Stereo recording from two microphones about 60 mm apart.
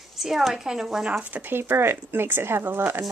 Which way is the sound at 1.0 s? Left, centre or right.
Right.